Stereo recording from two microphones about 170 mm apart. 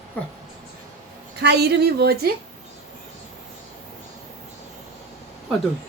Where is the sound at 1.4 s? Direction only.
70° right (ahead or behind).